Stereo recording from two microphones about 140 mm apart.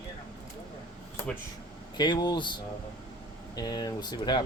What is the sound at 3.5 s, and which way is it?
Speech, 30° left (ahead or behind).